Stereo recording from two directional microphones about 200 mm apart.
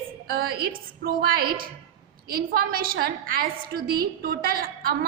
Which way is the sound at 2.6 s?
50° right (ahead or behind).